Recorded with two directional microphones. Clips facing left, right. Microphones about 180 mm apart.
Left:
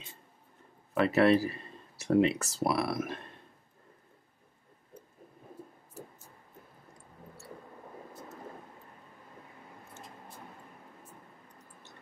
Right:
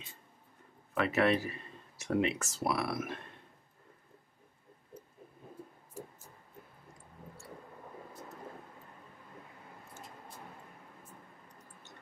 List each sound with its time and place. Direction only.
0.9 s speech: 35° left (ahead or behind)